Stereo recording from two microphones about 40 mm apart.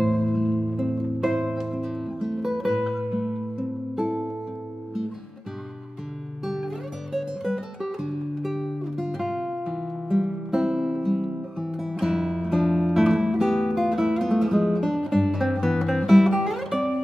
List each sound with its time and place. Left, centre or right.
0.0 s music: centre
6.4 s music: centre
12.0 s guitar: centre
14.2 s music: centre